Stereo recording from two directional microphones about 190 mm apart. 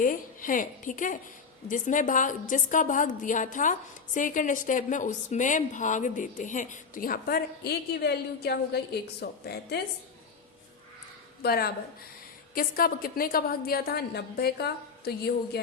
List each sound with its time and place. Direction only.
0.0 s a woman's voice: 45° left (ahead or behind)
11.4 s a woman's voice: 55° left (ahead or behind)